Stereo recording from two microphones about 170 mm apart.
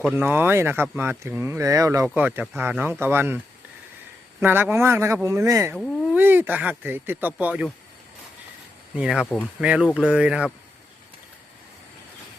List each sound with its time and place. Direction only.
0.0 s speech: centre (ahead or behind)
9.0 s speech: 5° right (ahead or behind)
9.6 s speech: 5° right (ahead or behind)